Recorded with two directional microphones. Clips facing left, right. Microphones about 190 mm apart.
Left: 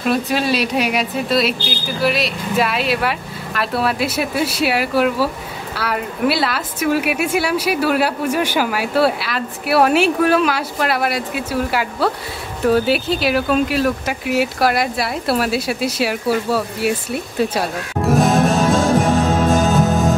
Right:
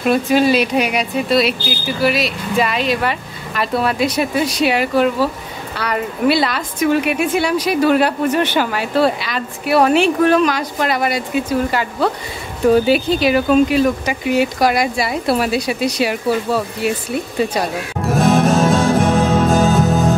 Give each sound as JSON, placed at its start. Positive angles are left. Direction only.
{"t": 0.0, "sound": "a woman's voice", "side_deg": 0}
{"t": 19.5, "sound": "music", "side_deg": 0}